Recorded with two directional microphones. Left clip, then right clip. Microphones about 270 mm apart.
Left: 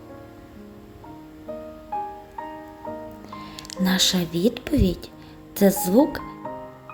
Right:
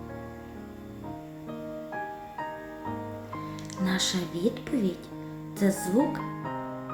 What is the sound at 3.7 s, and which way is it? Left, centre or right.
Speech, left.